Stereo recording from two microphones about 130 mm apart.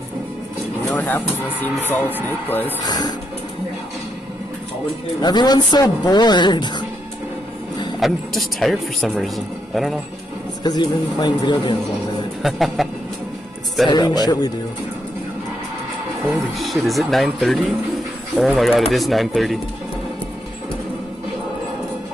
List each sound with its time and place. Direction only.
0.9 s speech: 15° left (ahead or behind)
2.8 s speech: 30° left (ahead or behind)
5.2 s speech: 35° left (ahead or behind)
8.0 s speech: centre (ahead or behind)
10.6 s speech: 30° left (ahead or behind)
12.4 s speech: centre (ahead or behind)
13.8 s speech: 30° left (ahead or behind)
16.5 s speech: centre (ahead or behind)